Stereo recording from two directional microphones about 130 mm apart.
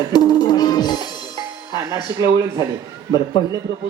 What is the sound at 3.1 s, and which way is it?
Speech, 35° left (ahead or behind).